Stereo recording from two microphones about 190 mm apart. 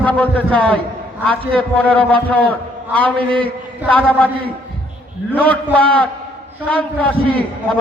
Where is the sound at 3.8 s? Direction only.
10° left (ahead or behind).